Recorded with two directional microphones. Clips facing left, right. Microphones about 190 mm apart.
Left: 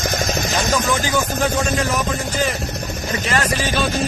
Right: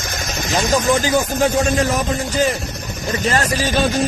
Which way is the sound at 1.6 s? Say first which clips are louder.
Right 3 dB; 40° right (ahead or behind).